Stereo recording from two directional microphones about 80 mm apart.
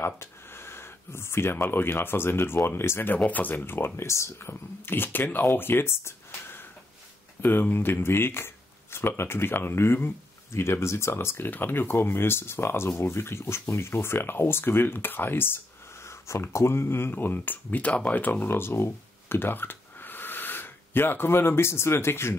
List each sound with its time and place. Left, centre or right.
0.0 s speech: left
3.2 s speech: centre